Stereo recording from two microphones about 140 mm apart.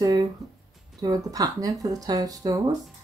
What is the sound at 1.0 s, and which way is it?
Speech, 25° right (ahead or behind).